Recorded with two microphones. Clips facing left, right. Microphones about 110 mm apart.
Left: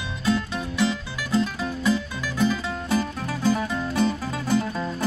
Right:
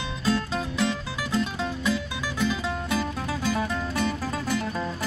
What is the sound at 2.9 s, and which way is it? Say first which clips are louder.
Music: left 2 dB; 20° left (ahead or behind).